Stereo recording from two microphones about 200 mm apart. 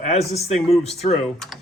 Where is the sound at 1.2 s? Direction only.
Centre (ahead or behind).